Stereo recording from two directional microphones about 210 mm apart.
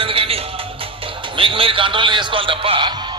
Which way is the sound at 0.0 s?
25° right (ahead or behind).